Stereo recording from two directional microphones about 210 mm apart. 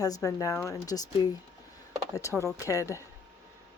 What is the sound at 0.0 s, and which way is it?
A woman's voice, 15° left (ahead or behind).